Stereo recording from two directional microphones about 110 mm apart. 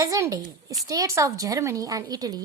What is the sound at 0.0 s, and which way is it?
A woman's voice, 30° right (ahead or behind).